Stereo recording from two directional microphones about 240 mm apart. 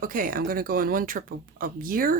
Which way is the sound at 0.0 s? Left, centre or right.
Right.